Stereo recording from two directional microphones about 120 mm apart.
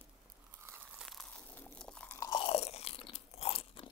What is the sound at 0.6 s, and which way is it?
Tearing, 20° right (ahead or behind).